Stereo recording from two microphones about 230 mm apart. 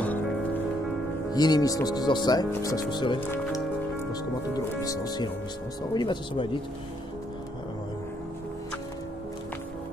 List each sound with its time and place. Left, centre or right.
1.3 s speech: centre